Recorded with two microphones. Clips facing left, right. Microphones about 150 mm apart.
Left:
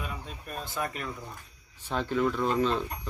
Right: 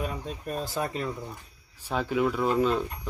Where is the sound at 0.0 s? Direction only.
35° right (ahead or behind).